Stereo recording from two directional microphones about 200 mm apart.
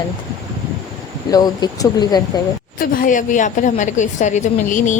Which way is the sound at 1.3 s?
20° left (ahead or behind).